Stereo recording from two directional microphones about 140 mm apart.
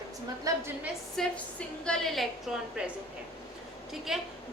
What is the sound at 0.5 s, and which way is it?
Speech, 25° right (ahead or behind).